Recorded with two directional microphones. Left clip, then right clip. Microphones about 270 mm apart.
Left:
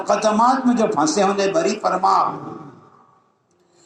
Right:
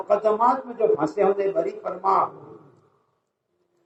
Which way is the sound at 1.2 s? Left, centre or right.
Left.